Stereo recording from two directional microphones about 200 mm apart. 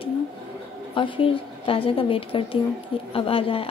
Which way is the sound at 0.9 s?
25° left (ahead or behind).